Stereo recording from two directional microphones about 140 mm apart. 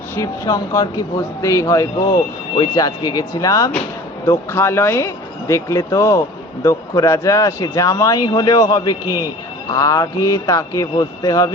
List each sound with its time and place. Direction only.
0.2 s speech: 25° left (ahead or behind)